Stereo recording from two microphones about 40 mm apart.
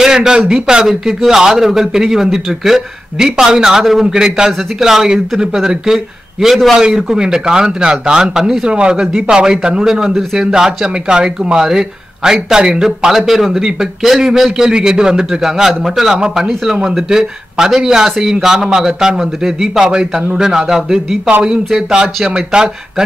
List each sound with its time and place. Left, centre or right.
0.0 s a sound: centre
0.5 s a man's voice: right
0.8 s a man's voice: centre
4.5 s speech: centre
6.5 s a man's voice: centre
8.6 s a man's voice: right